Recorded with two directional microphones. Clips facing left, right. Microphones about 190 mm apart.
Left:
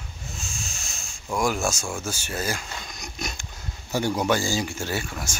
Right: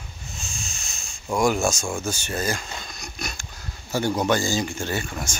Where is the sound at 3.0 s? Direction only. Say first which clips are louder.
Left 1 dB; 20° left (ahead or behind).